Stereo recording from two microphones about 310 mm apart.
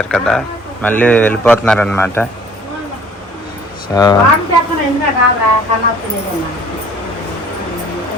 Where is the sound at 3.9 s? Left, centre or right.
Centre.